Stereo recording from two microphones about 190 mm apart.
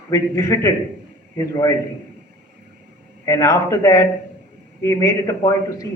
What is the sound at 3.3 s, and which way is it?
A man's voice, 15° left (ahead or behind).